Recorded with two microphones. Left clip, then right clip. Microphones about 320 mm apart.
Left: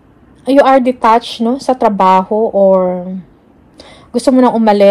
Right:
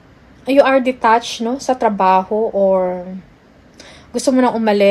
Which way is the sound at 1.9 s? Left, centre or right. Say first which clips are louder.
Left 4 dB; left.